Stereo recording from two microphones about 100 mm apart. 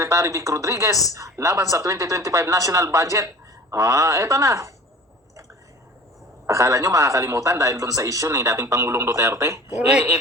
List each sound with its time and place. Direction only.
0.0 s speech: 30° right (ahead or behind)
6.5 s speech: 35° right (ahead or behind)
9.6 s speech: 15° right (ahead or behind)